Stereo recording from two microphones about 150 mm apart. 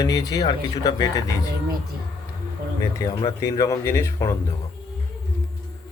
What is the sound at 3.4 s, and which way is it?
Speech, 25° left (ahead or behind).